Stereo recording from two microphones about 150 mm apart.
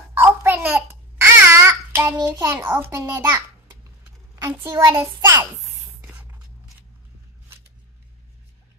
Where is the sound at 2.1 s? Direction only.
25° right (ahead or behind).